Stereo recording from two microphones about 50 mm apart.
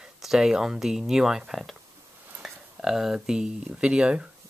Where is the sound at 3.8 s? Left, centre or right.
Right.